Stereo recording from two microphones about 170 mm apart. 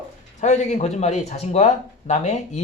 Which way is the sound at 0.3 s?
45° left (ahead or behind).